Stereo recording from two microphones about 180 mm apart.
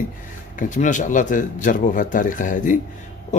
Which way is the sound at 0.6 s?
45° left (ahead or behind).